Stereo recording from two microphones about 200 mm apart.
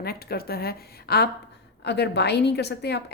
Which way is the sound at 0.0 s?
50° left (ahead or behind).